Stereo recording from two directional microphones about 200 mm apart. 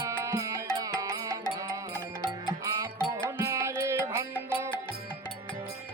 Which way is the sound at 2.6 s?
15° right (ahead or behind).